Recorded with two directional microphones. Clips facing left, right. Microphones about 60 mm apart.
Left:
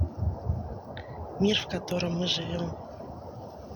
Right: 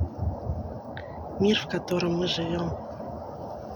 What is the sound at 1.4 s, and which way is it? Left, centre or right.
Speech, centre.